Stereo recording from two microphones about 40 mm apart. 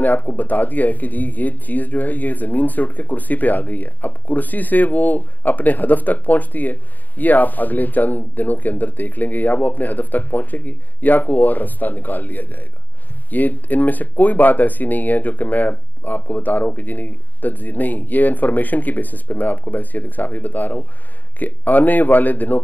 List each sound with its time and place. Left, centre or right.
0.0 s speech: left